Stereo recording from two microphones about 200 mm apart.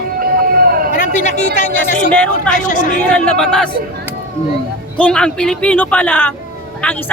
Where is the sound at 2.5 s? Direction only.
40° left (ahead or behind).